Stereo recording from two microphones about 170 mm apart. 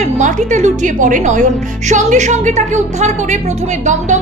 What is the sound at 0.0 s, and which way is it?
A woman's voice, 45° right (ahead or behind).